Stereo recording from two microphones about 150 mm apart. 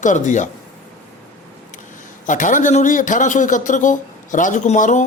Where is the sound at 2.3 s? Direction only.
60° left (ahead or behind).